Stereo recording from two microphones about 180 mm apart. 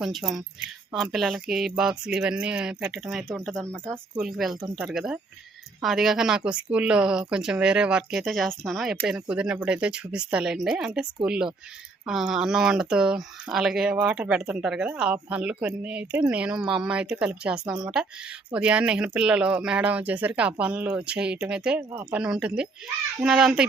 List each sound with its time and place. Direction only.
0.0 s speech: 5° right (ahead or behind)
3.7 s speech: 15° right (ahead or behind)
4.2 s speech: centre (ahead or behind)